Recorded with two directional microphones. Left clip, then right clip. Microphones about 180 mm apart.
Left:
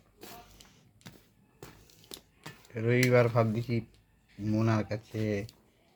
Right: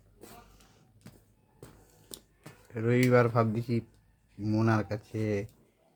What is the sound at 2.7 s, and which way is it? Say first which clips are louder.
Speech: even; 30° right (ahead or behind).